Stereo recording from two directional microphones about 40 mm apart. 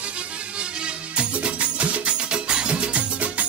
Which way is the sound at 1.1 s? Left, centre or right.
Right.